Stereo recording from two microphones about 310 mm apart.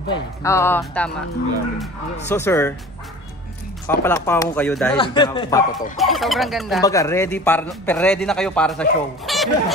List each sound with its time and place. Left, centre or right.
0.1 s speech: centre
2.2 s speech: centre
3.8 s speech: centre
4.9 s speech: centre
5.9 s a man's voice: centre
6.8 s a man's voice: centre